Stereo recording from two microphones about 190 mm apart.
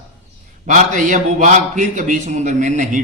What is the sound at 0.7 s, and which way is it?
A woman's voice, 40° right (ahead or behind).